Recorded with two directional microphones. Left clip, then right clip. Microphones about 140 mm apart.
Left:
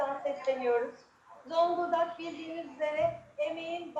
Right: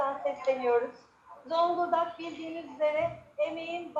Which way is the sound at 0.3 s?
20° left (ahead or behind).